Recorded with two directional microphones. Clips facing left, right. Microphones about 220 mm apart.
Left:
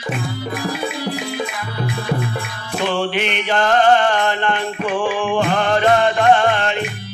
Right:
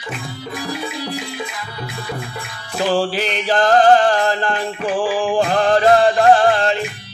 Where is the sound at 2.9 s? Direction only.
35° right (ahead or behind).